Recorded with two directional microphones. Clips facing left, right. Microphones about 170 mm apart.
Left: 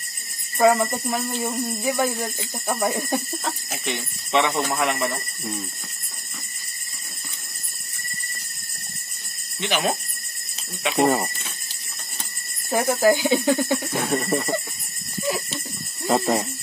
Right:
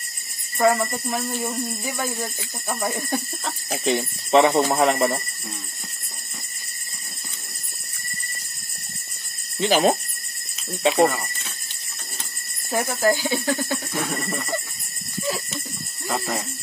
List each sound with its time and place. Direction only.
0.6 s speech: 15° left (ahead or behind)
3.8 s speech: 35° right (ahead or behind)
9.6 s speech: 30° right (ahead or behind)
12.7 s speech: 15° left (ahead or behind)
16.1 s speech: 30° left (ahead or behind)